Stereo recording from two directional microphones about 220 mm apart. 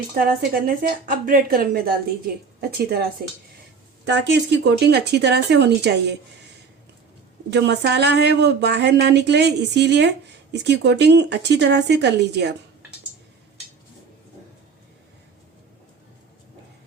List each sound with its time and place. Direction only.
0.2 s a woman's voice: 40° right (ahead or behind)
7.5 s a woman's voice: 50° right (ahead or behind)